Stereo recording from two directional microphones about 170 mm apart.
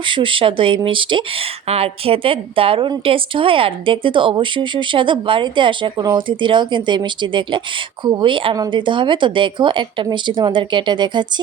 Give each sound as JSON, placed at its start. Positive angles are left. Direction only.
{"t": 0.0, "sound": "speech", "side_deg": -30}